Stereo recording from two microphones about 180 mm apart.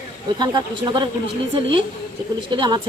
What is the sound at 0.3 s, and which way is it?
Speech, 25° right (ahead or behind).